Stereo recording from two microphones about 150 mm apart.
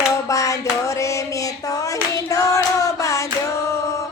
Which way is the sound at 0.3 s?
20° left (ahead or behind).